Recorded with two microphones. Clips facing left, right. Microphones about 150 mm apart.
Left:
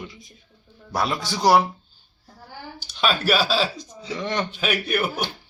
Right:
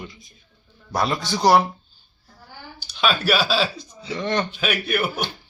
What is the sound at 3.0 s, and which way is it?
Speech, 10° right (ahead or behind).